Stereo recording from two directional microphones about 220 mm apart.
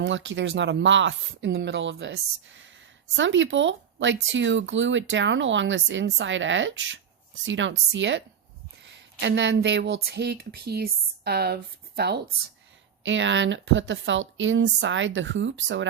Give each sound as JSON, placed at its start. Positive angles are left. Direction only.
{"t": 0.0, "sound": "speech", "side_deg": -55}
{"t": 13.0, "sound": "speech", "side_deg": -55}